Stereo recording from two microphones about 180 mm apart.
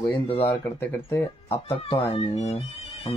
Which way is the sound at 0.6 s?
15° left (ahead or behind).